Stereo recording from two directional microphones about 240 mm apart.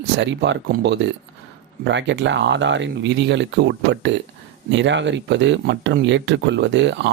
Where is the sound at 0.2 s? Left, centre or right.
Right.